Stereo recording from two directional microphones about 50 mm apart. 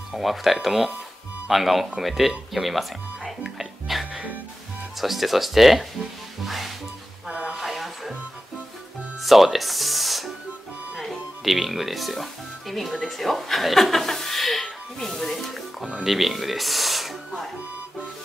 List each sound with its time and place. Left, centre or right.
0.2 s speech: centre
6.4 s music: centre
7.2 s a sound: right
7.5 s music: centre
9.2 s speech: centre